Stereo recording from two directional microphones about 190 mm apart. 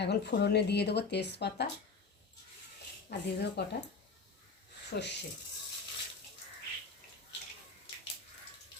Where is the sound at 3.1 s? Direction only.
60° left (ahead or behind).